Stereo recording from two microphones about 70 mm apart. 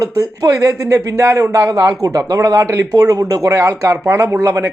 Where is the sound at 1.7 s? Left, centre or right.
Right.